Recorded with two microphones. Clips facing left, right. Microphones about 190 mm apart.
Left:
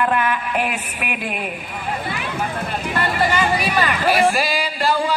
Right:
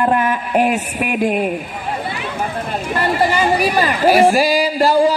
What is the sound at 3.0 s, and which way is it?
A woman's voice, 40° right (ahead or behind).